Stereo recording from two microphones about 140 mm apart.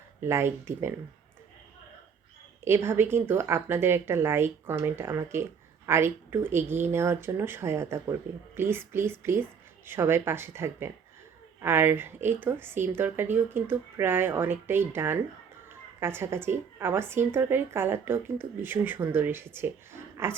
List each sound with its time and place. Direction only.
0.2 s speech: 20° right (ahead or behind)
2.6 s speech: 15° right (ahead or behind)